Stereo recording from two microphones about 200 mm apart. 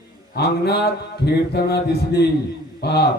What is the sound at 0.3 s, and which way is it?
Mantra, 55° left (ahead or behind).